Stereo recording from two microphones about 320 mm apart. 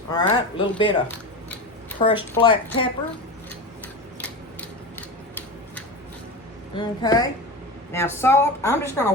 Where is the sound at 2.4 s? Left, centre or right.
Centre.